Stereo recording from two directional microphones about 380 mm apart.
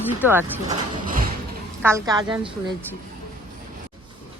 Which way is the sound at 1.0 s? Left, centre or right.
Right.